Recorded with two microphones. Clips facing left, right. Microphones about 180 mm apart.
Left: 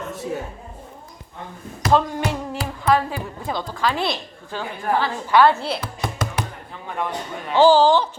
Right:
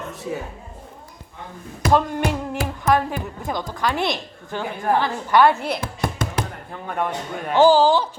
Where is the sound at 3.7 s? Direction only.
15° right (ahead or behind).